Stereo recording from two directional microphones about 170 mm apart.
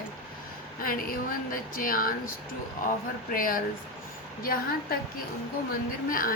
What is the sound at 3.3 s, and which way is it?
Speech, 55° left (ahead or behind).